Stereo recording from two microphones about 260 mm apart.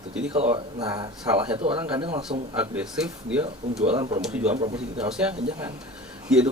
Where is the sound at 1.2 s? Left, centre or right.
Centre.